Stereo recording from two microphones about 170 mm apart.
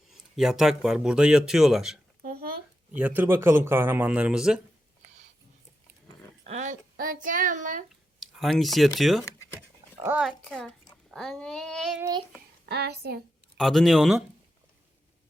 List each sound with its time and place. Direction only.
0.1 s speech: centre (ahead or behind)
2.2 s a sound: 60° right (ahead or behind)
2.9 s a man's voice: 10° right (ahead or behind)
6.4 s a sound: 45° right (ahead or behind)
8.2 s speech: centre (ahead or behind)
9.6 s a sound: 10° right (ahead or behind)
11.1 s speech: centre (ahead or behind)
12.6 s a woman's voice: 70° right (ahead or behind)
13.6 s speech: centre (ahead or behind)